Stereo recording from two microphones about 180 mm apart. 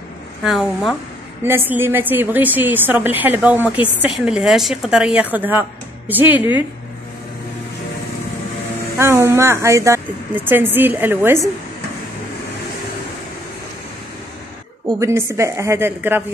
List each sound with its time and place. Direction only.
0.4 s a woman's voice: centre (ahead or behind)
1.4 s a woman's voice: 10° right (ahead or behind)
8.9 s a woman's voice: 15° right (ahead or behind)
14.9 s a woman's voice: 15° right (ahead or behind)